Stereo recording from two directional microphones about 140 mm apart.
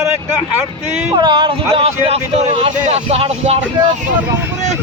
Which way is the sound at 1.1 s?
35° right (ahead or behind).